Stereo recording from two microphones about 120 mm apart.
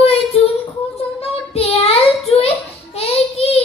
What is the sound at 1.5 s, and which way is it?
Child singing, 55° left (ahead or behind).